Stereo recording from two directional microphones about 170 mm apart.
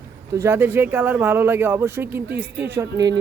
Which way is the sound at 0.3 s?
15° right (ahead or behind).